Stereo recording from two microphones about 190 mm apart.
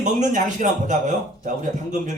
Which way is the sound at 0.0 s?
40° right (ahead or behind).